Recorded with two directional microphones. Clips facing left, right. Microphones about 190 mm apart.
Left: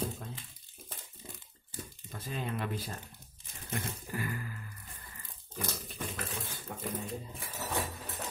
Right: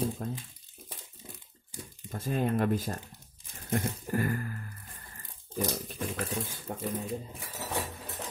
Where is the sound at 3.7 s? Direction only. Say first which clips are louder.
Right 7 dB; 50° right (ahead or behind).